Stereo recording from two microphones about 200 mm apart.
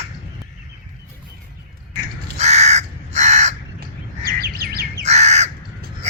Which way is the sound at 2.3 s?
35° right (ahead or behind).